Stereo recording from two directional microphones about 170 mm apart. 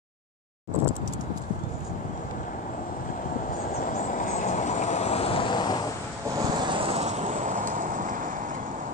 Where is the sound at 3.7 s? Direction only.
50° left (ahead or behind); by 5.8 s 25° left (ahead or behind).